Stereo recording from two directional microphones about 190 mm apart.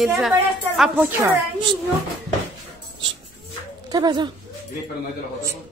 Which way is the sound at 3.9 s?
20° right (ahead or behind).